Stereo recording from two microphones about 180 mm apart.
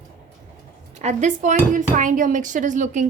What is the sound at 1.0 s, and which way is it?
Speech, 40° right (ahead or behind).